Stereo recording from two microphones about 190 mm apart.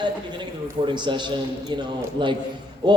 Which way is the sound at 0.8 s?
25° right (ahead or behind).